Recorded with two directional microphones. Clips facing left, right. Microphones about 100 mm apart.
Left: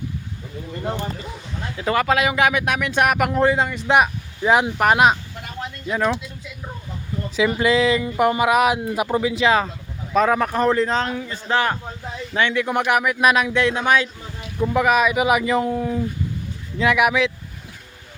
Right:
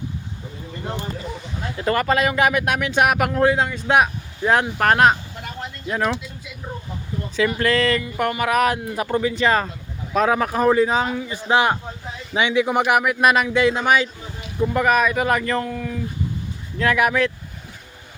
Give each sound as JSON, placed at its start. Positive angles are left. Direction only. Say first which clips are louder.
{"t": 1.8, "sound": "speech", "louder": "even", "side_deg": 0}
{"t": 7.3, "sound": "speech", "louder": "left 1 dB", "side_deg": 5}
{"t": 8.0, "sound": "speech", "louder": "left 4 dB", "side_deg": 20}
{"t": 15.7, "sound": "speech", "louder": "left 5 dB", "side_deg": 25}
{"t": 16.7, "sound": "speech", "louder": "left 1 dB", "side_deg": 5}